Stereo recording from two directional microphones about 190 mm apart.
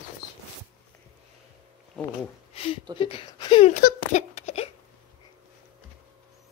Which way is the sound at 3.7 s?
40° left (ahead or behind).